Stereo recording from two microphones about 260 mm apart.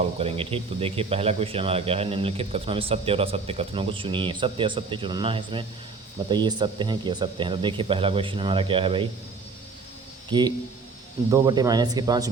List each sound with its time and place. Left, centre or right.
0.2 s speech: right
10.2 s a man's voice: centre